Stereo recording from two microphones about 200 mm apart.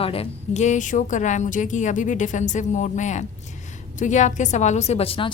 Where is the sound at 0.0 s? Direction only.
30° left (ahead or behind).